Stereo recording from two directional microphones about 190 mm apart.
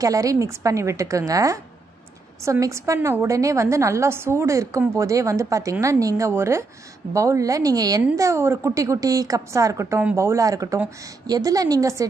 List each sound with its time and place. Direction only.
0.0 s a woman's voice: 20° right (ahead or behind)